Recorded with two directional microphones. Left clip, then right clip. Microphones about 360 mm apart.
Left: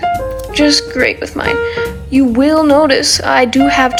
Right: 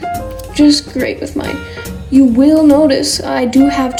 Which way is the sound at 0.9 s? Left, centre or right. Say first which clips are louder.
Left 4 dB; left.